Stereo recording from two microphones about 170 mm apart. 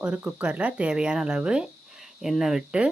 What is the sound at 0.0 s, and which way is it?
Speech, 5° right (ahead or behind).